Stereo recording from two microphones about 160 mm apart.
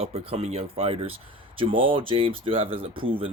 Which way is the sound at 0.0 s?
40° right (ahead or behind).